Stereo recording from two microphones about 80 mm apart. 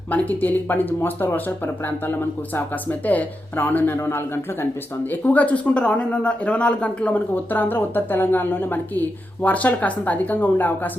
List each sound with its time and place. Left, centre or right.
0.1 s a man's voice: left
5.1 s speech: centre